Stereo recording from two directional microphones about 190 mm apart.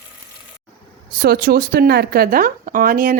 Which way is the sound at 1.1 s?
55° right (ahead or behind).